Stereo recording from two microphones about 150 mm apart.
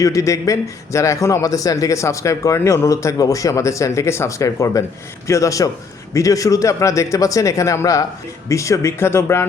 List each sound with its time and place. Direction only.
0.0 s a man's voice: 20° left (ahead or behind)